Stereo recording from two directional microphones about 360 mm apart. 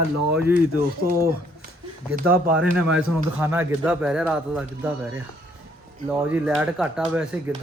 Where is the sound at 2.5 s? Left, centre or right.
Centre.